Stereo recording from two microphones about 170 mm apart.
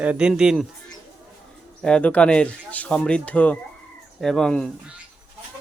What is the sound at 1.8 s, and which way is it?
Speech, 5° left (ahead or behind).